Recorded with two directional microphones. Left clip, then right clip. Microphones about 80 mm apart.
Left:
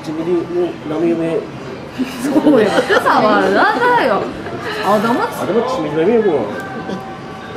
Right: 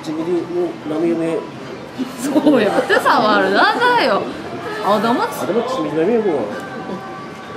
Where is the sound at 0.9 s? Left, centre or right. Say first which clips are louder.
Left 1 dB; centre.